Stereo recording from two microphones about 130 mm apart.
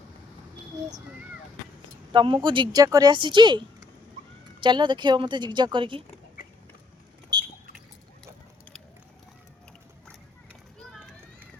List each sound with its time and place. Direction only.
2.1 s speech: 40° right (ahead or behind)